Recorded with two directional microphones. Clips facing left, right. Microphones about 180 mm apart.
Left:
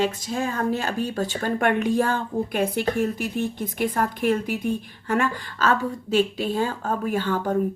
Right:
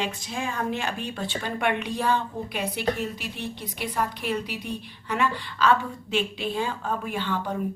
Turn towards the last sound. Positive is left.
turn(degrees=45)  # may be behind; listen again after turning